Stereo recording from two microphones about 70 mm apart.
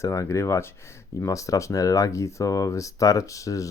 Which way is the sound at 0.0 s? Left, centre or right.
Left.